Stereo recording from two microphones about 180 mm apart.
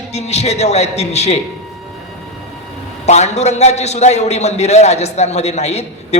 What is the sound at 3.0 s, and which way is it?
A man's voice, 40° left (ahead or behind).